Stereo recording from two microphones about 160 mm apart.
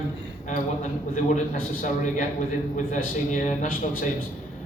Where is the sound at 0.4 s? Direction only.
50° left (ahead or behind).